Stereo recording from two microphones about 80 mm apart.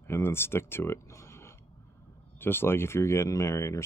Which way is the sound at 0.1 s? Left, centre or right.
Left.